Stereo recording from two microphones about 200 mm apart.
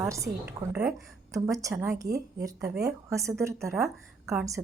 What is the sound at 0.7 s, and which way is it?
Speech, 5° right (ahead or behind).